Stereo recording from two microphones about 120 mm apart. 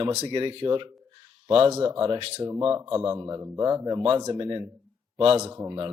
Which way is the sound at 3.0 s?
25° right (ahead or behind).